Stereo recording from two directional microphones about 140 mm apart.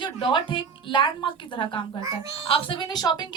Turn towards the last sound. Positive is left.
turn(degrees=30)  # may be behind; listen again after turning